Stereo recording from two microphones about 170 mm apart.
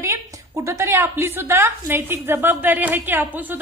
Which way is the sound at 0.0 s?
15° right (ahead or behind).